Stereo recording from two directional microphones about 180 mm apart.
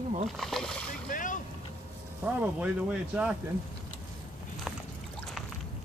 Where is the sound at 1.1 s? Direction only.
45° left (ahead or behind).